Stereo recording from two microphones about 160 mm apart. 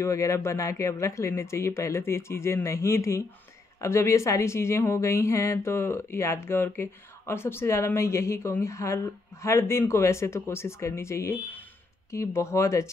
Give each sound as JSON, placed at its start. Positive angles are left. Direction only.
{"t": 0.0, "sound": "a woman's voice", "side_deg": 20}